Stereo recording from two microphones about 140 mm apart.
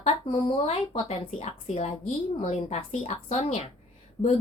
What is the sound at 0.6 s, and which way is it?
Speech, 45° left (ahead or behind).